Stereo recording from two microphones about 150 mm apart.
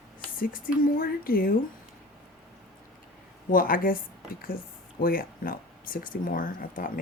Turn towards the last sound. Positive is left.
turn(degrees=65)  # may be behind; listen again after turning